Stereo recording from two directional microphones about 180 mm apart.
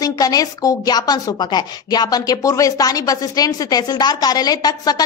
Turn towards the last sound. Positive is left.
turn(degrees=20)  # may be behind; listen again after turning